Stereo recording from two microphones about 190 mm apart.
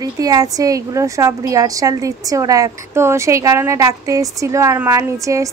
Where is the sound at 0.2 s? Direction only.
20° right (ahead or behind).